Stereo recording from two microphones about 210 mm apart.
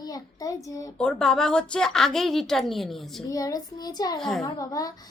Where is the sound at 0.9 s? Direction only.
5° left (ahead or behind).